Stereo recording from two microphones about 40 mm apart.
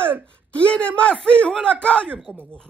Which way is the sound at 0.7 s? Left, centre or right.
Left.